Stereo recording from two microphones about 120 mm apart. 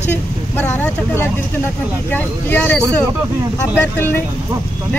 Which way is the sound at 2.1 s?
15° left (ahead or behind).